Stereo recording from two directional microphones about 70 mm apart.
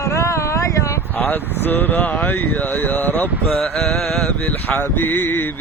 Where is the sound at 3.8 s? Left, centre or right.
Centre.